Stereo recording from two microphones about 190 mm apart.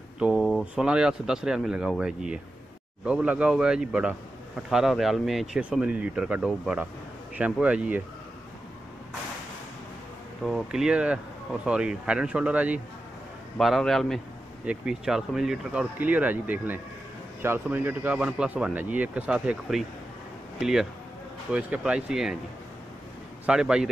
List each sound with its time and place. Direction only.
0.2 s speech: 5° right (ahead or behind)
10.4 s speech: centre (ahead or behind)
23.4 s speech: 5° right (ahead or behind)